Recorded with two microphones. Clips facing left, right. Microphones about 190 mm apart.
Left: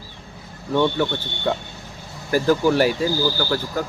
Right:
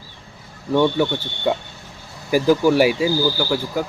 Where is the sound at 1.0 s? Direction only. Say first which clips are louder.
Right 2 dB; 10° right (ahead or behind).